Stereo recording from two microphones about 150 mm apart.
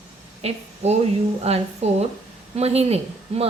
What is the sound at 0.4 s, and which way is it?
A woman's voice, 45° right (ahead or behind).